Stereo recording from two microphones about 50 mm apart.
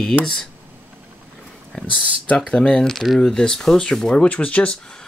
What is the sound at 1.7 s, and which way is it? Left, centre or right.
Speech, centre.